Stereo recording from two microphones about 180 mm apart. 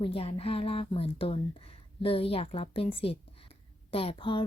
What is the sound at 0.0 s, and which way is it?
Speech, 30° left (ahead or behind).